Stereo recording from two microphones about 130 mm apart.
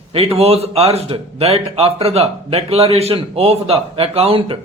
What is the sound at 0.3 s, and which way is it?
A man's voice, 50° right (ahead or behind).